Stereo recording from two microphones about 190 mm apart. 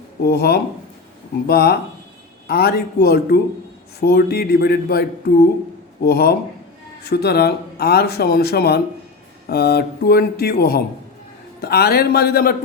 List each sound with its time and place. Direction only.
0.2 s speech: 55° left (ahead or behind)